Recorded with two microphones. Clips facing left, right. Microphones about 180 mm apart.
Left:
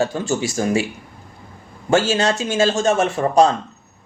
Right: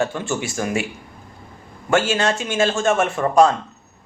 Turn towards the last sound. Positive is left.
turn(degrees=30)  # may be behind; listen again after turning